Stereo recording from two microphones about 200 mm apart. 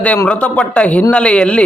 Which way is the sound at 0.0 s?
5° left (ahead or behind).